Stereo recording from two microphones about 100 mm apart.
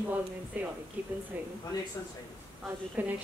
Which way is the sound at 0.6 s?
15° right (ahead or behind).